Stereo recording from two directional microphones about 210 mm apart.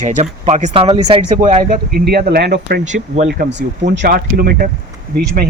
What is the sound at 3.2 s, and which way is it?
Speech, 55° right (ahead or behind).